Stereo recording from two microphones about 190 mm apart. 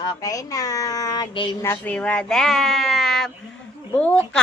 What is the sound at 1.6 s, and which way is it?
A woman's voice, 10° left (ahead or behind).